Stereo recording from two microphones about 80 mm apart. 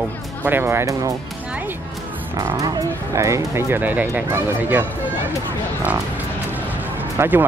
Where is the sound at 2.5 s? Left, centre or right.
Right.